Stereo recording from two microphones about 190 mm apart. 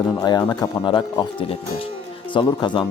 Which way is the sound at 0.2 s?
20° left (ahead or behind).